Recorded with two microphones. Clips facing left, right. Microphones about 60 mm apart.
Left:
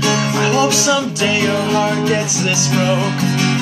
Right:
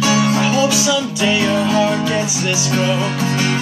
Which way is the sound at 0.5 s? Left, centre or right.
Centre.